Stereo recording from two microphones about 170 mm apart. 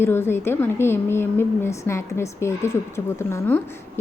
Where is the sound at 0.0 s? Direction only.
15° left (ahead or behind).